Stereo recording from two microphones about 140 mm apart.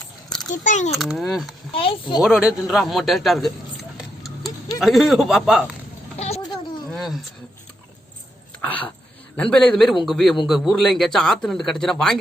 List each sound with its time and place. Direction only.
0.5 s a child's voice: 65° left (ahead or behind)
0.9 s a man's voice: centre (ahead or behind)
1.7 s speech: 40° left (ahead or behind)
2.2 s a man's voice: 5° right (ahead or behind)
3.9 s tick-tock: centre (ahead or behind)
4.8 s a man's voice: centre (ahead or behind)
6.1 s a sound: 50° left (ahead or behind)
6.9 s a sound: centre (ahead or behind)
8.6 s a man's voice: 10° left (ahead or behind)